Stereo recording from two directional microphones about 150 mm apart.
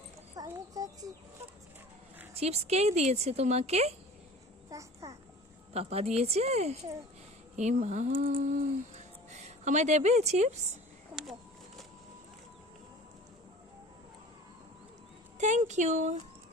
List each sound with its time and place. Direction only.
0.3 s a sound: 25° right (ahead or behind)
2.3 s speech: 45° right (ahead or behind)
4.7 s babbling: 20° right (ahead or behind)
5.7 s speech: 40° right (ahead or behind)
11.1 s a sound: 5° right (ahead or behind)
15.4 s speech: 55° right (ahead or behind)